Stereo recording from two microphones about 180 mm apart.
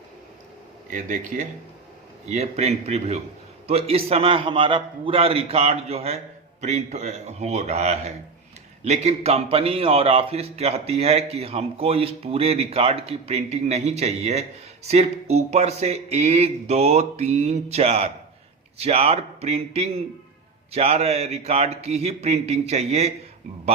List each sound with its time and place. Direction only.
0.9 s speech: 45° right (ahead or behind)